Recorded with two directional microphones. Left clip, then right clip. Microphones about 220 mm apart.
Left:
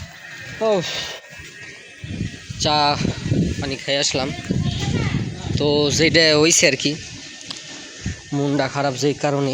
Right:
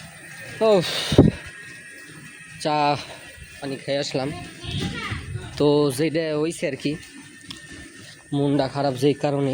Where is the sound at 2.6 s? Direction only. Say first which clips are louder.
Left 3 dB; 10° right (ahead or behind).